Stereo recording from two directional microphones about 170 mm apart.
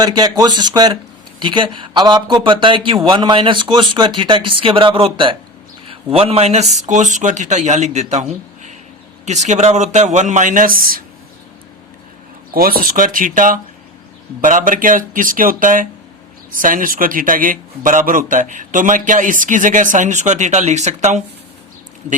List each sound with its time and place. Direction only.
0.0 s speech: 25° right (ahead or behind); by 11.0 s 60° right (ahead or behind)
12.5 s speech: 60° right (ahead or behind)